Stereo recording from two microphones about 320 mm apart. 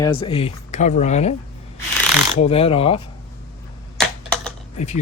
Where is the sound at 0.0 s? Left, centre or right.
Centre.